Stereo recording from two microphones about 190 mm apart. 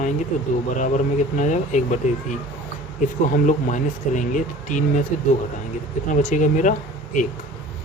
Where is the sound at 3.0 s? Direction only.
40° left (ahead or behind).